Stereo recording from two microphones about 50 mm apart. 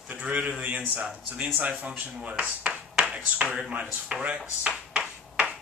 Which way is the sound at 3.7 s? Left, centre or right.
Right.